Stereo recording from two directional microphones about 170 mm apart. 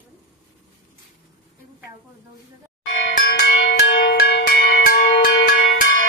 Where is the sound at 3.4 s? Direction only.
60° left (ahead or behind).